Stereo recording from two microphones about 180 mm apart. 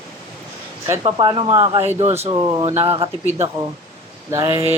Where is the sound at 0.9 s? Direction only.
25° right (ahead or behind).